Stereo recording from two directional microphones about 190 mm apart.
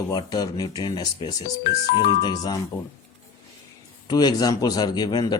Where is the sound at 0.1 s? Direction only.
20° left (ahead or behind).